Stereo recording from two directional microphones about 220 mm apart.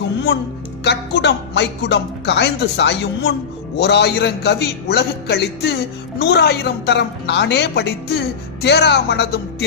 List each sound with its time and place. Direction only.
0.9 s speech: 50° left (ahead or behind)